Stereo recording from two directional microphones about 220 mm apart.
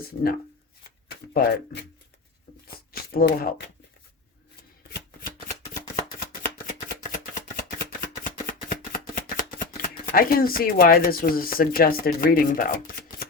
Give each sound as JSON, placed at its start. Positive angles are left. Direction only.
{"t": 0.0, "sound": "speech", "side_deg": 45}
{"t": 2.9, "sound": "a sound", "side_deg": 45}
{"t": 6.0, "sound": "chopping", "side_deg": 35}
{"t": 9.8, "sound": "speech", "side_deg": 40}